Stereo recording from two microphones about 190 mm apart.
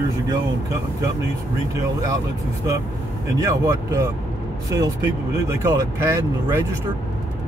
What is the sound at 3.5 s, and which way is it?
Speech, 15° right (ahead or behind).